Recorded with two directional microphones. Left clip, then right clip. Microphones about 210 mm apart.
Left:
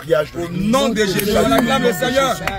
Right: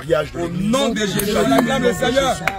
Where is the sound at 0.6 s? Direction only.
35° left (ahead or behind).